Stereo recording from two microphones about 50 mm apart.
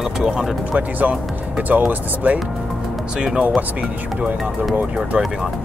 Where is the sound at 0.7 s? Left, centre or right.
Right.